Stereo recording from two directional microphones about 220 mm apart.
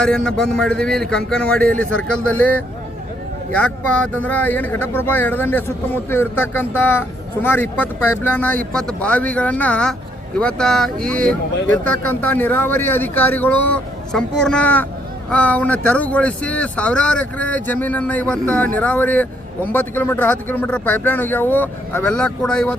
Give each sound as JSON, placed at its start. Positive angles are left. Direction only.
{"t": 0.0, "sound": "a man's voice", "side_deg": 5}